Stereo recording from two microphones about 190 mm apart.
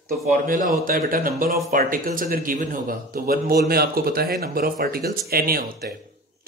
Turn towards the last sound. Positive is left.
turn(degrees=-50)  # may be behind; listen again after turning